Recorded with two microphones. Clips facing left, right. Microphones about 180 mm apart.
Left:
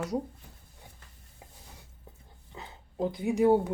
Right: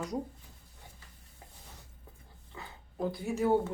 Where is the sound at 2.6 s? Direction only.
20° left (ahead or behind).